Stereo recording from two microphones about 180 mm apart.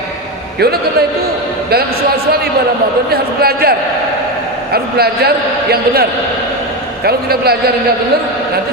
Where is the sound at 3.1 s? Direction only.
60° right (ahead or behind).